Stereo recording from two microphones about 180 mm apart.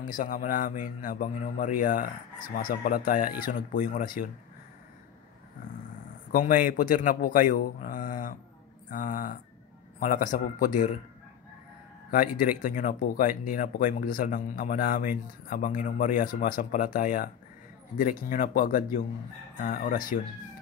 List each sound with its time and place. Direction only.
0.1 s speech: 50° left (ahead or behind)
6.3 s speech: 50° left (ahead or behind)
12.1 s speech: 50° left (ahead or behind)